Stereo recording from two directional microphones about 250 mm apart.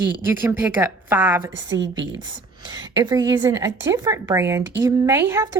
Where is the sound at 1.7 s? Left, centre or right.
Right.